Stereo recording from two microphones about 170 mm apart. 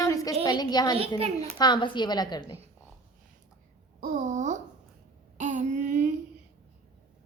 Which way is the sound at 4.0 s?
45° right (ahead or behind).